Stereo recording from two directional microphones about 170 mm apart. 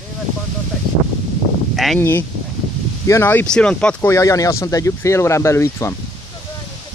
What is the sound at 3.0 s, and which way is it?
Speech, 15° left (ahead or behind).